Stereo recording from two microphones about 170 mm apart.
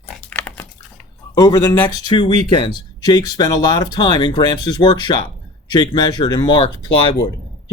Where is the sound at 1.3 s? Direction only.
20° left (ahead or behind).